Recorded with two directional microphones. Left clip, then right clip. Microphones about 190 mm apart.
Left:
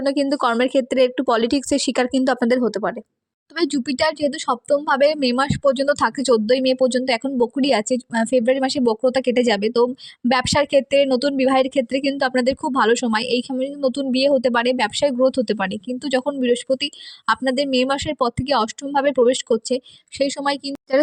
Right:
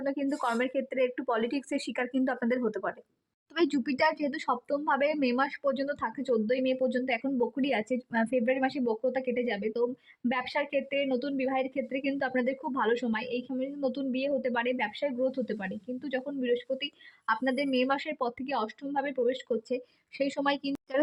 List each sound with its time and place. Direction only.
0.0 s speech: 35° left (ahead or behind)